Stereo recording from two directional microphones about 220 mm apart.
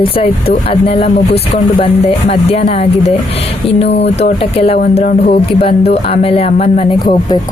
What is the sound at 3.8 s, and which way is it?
Speech, 50° left (ahead or behind).